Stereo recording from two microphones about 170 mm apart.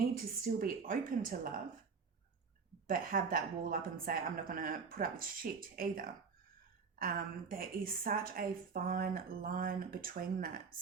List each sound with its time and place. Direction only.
0.4 s a woman's voice: 55° right (ahead or behind)
2.8 s a woman's voice: 55° right (ahead or behind)